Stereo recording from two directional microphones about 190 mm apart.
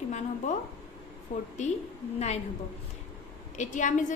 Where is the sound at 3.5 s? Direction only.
40° left (ahead or behind).